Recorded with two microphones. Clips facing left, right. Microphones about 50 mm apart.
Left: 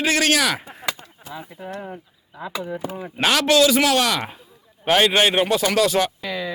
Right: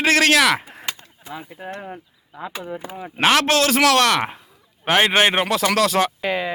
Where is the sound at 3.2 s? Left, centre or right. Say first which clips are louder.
Even; right.